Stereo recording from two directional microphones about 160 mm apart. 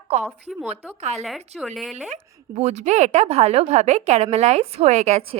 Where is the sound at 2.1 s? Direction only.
45° right (ahead or behind).